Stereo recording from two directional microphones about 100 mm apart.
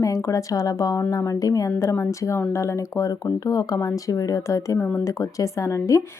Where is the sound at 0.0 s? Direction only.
30° left (ahead or behind).